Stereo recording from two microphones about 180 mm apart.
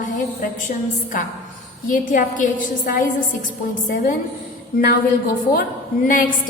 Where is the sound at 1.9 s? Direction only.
45° left (ahead or behind).